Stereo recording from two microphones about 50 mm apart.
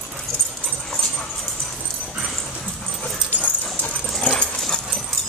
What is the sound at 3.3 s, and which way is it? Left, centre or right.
Dog, left.